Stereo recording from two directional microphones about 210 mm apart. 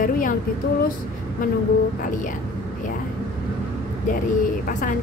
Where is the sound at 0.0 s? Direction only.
40° left (ahead or behind).